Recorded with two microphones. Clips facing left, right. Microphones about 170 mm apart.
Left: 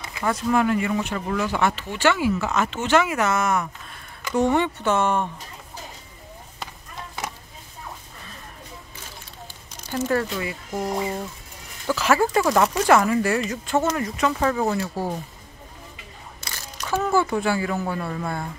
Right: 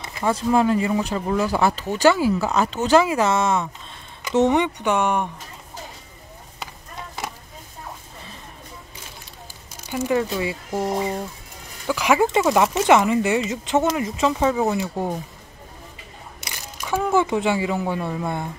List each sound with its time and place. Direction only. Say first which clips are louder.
0.2 s speech: right 2 dB; 25° right (ahead or behind)
9.8 s speech: right 2 dB; 15° right (ahead or behind)
10.4 s speech: right 3 dB; 25° right (ahead or behind)
11.9 s speech: right 1 dB; 15° right (ahead or behind)
12.4 s speech: right 1 dB; 10° right (ahead or behind)
12.7 s speech: right 1 dB; 20° right (ahead or behind)
16.3 s a sound: even; 15° right (ahead or behind)
17.1 s speech: right 2 dB; 20° right (ahead or behind)